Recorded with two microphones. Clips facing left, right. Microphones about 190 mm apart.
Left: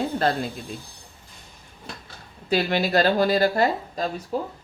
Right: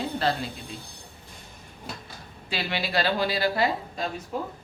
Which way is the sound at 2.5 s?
45° left (ahead or behind).